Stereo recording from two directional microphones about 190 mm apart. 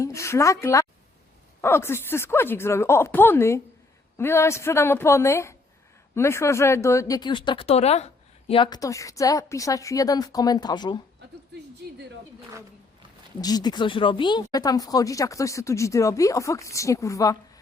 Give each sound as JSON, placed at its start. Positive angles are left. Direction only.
{"t": 0.0, "sound": "speech", "side_deg": 15}
{"t": 13.4, "sound": "speech", "side_deg": 20}